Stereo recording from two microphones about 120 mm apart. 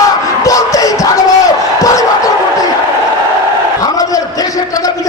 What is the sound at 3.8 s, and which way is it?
Battle cry, 30° left (ahead or behind).